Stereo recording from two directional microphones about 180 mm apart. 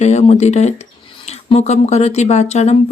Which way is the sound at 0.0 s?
40° left (ahead or behind).